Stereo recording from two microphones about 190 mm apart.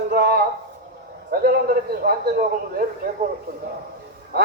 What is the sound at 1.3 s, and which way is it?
Speech, 55° right (ahead or behind).